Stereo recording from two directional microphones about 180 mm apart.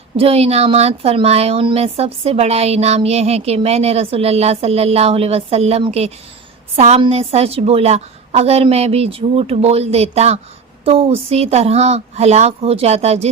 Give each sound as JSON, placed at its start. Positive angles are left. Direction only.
{"t": 0.2, "sound": "speech", "side_deg": -35}